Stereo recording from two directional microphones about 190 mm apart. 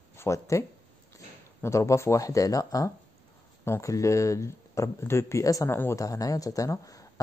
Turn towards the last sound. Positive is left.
turn(degrees=15)  # may be behind; listen again after turning